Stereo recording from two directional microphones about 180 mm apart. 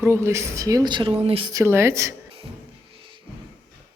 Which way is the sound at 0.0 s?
15° right (ahead or behind).